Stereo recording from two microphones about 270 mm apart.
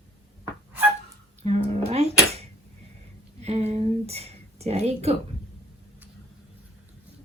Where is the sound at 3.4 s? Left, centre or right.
Right.